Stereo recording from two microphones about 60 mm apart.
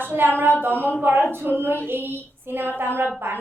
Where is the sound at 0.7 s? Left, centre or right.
Left.